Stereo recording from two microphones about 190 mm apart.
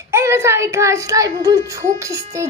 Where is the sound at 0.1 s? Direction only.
15° right (ahead or behind).